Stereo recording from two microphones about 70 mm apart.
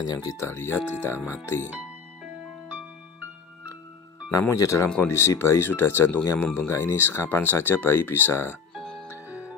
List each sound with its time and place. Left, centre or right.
0.0 s speech: left
0.4 s speech: left
4.6 s speech: left
5.0 s speech: left
8.7 s music: centre
9.3 s music: right